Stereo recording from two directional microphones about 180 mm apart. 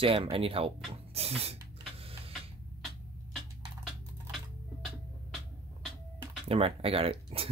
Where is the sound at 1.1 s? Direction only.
35° right (ahead or behind).